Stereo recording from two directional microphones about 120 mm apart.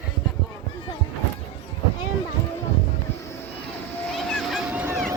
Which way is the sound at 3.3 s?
15° left (ahead or behind).